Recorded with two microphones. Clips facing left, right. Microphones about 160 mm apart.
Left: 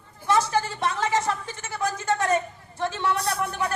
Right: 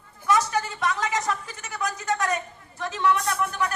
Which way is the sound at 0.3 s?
30° left (ahead or behind).